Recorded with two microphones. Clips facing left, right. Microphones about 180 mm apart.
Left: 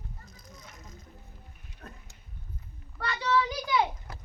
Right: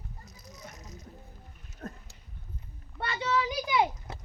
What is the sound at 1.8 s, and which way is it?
Horse, 45° right (ahead or behind).